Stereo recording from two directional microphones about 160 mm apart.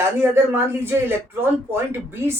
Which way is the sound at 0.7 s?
15° right (ahead or behind).